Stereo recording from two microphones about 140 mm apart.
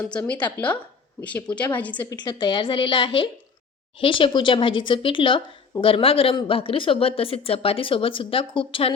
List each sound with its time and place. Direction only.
0.0 s speech: 10° left (ahead or behind)
2.0 s a woman's voice: 30° left (ahead or behind)